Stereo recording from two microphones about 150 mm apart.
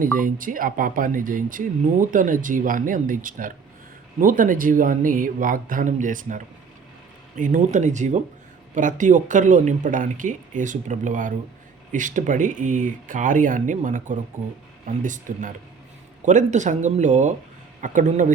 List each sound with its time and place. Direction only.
0.0 s speech: 65° right (ahead or behind)